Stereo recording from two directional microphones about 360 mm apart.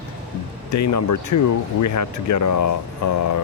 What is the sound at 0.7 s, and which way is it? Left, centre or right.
Speech, left.